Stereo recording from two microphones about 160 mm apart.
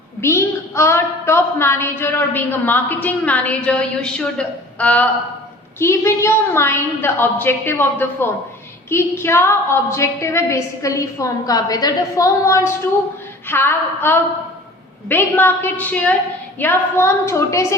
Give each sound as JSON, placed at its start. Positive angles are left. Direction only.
{"t": 0.2, "sound": "a woman's voice", "side_deg": 15}